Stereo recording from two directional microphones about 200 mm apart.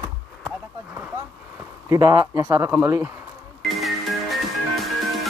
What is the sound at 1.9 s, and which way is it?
Speech, 20° right (ahead or behind).